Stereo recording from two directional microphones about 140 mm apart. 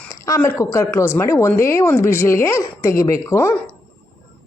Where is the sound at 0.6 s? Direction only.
20° left (ahead or behind).